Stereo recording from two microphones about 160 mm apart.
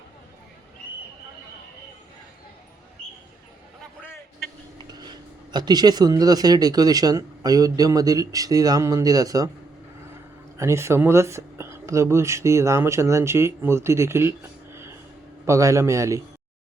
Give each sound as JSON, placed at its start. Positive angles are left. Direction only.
{"t": 4.9, "sound": "speech", "side_deg": -25}
{"t": 10.6, "sound": "speech", "side_deg": -15}